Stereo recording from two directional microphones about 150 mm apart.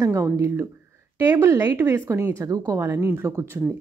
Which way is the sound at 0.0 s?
20° right (ahead or behind).